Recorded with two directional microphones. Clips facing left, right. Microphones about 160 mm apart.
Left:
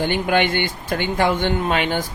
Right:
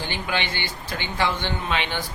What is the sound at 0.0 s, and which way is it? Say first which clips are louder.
Speech: left 9 dB; 50° left (ahead or behind).